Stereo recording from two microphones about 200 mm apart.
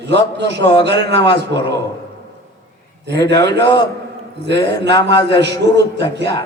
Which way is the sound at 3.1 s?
60° right (ahead or behind).